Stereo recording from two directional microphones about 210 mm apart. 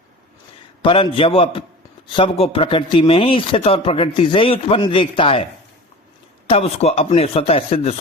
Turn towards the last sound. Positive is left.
turn(degrees=30)  # may be behind; listen again after turning